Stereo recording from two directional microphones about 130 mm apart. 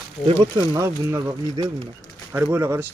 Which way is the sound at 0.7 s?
20° right (ahead or behind).